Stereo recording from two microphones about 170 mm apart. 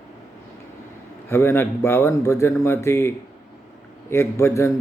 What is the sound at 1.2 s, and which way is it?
A man's voice, 15° left (ahead or behind).